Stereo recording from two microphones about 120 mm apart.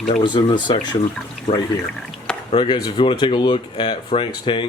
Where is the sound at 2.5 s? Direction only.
40° left (ahead or behind).